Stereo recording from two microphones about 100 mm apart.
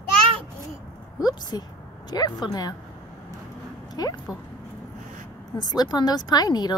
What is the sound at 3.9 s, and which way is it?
Speech, 40° left (ahead or behind).